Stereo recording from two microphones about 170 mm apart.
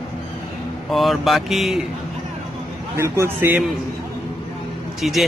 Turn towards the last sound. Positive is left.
turn(degrees=0)  # may be behind; listen again after turning